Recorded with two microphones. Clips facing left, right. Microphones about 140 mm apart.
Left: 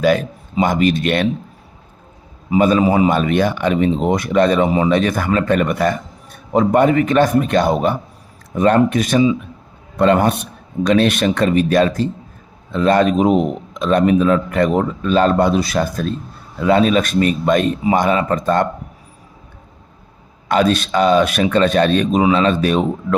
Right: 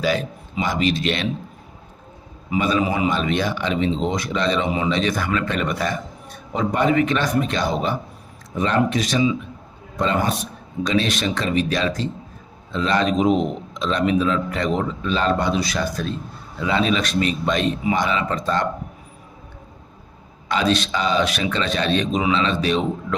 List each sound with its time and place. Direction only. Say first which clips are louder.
0.0 s a man's voice: left 7 dB; 55° left (ahead or behind)
2.6 s a man's voice: left 7 dB; 45° left (ahead or behind)
10.0 s a man's voice: left 8 dB; 60° left (ahead or behind)
20.5 s a man's voice: left 5 dB; 50° left (ahead or behind)